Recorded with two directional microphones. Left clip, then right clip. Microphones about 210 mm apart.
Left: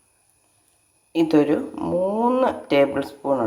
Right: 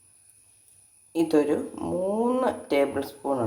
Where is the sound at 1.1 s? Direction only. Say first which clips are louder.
Left 4 dB; 5° left (ahead or behind).